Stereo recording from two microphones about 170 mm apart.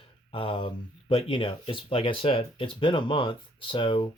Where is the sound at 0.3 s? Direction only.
30° left (ahead or behind).